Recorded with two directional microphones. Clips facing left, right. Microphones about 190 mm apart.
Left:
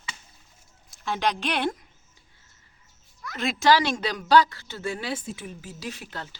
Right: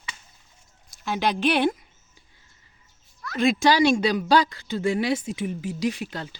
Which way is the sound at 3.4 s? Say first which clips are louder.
Right 3 dB; 15° right (ahead or behind).